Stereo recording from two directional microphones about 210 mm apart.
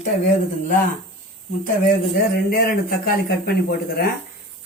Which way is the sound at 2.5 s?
45° left (ahead or behind).